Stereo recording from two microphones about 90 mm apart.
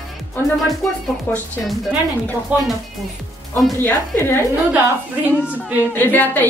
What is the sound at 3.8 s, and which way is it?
Speech, 25° left (ahead or behind).